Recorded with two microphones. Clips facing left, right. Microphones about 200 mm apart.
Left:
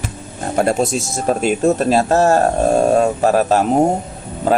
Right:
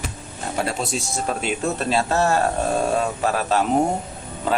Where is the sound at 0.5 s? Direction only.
45° left (ahead or behind).